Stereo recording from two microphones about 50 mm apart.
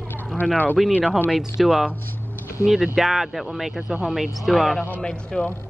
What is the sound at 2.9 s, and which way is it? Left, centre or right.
Speech, centre.